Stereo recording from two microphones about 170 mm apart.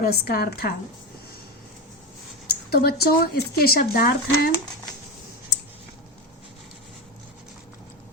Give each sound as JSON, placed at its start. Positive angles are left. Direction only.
{"t": 0.0, "sound": "speech", "side_deg": 65}
{"t": 2.6, "sound": "speech", "side_deg": 65}